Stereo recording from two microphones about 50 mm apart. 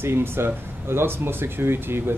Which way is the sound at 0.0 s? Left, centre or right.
Right.